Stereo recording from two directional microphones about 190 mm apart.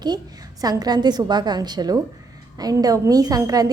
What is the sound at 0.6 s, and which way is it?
A woman's voice, 20° right (ahead or behind).